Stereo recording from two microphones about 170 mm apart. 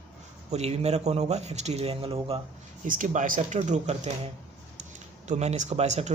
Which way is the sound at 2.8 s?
50° right (ahead or behind).